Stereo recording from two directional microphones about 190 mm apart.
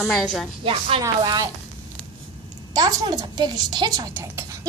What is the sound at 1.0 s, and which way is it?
Speech, 20° right (ahead or behind).